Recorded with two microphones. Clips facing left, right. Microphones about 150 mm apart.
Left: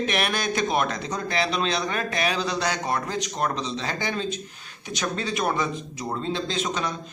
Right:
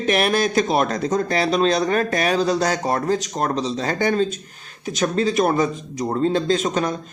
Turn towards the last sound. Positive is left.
turn(degrees=-45)  # may be behind; listen again after turning